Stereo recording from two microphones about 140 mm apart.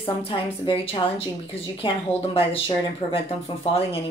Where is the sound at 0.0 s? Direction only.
40° left (ahead or behind).